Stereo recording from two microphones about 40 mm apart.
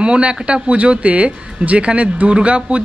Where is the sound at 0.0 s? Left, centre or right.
Right.